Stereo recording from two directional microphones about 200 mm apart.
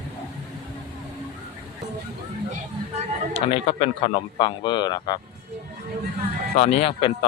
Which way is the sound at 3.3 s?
30° left (ahead or behind).